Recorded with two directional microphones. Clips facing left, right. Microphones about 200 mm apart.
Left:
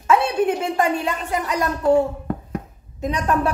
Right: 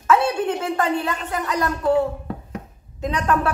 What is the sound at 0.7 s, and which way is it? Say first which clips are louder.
Speech: left 1 dB; 15° left (ahead or behind).